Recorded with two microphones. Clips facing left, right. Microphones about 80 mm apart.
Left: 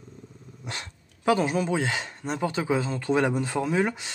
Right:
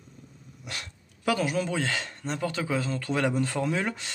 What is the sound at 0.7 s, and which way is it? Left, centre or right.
Speech, left.